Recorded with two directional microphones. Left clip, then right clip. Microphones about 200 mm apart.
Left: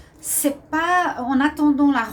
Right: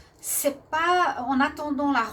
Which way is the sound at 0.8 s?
40° right (ahead or behind).